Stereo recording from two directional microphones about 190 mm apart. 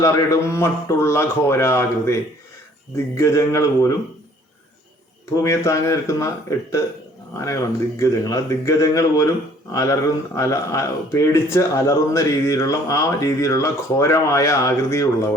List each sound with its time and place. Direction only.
0.0 s speech: 15° left (ahead or behind)
5.3 s speech: 15° left (ahead or behind)